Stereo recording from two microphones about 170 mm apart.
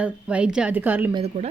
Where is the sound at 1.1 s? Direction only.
35° right (ahead or behind).